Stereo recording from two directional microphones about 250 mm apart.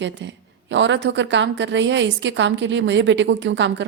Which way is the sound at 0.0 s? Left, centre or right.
Right.